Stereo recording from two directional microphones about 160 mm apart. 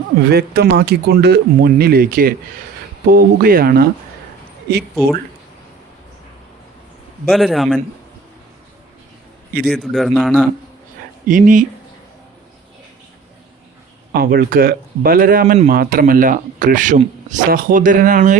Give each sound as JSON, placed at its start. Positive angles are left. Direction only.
{"t": 0.3, "sound": "speech", "side_deg": -80}
{"t": 7.3, "sound": "a man's voice", "side_deg": 0}
{"t": 9.6, "sound": "a man's voice", "side_deg": 0}
{"t": 11.3, "sound": "speech", "side_deg": -55}
{"t": 14.1, "sound": "speech", "side_deg": -65}